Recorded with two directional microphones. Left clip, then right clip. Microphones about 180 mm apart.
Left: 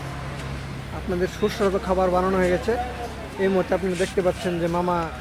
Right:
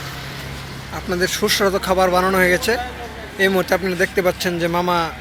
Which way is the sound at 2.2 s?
25° right (ahead or behind).